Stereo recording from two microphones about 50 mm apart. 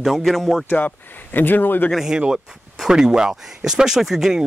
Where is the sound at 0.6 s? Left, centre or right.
Left.